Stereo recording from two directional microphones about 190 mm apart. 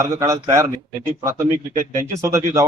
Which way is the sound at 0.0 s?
15° right (ahead or behind).